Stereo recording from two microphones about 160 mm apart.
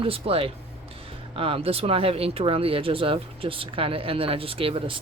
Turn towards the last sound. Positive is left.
turn(degrees=-35)  # may be behind; listen again after turning